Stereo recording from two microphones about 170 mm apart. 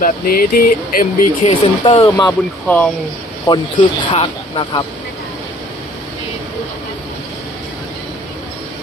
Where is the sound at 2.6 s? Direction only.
10° left (ahead or behind).